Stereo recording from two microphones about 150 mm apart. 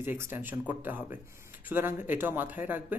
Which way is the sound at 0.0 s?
15° right (ahead or behind).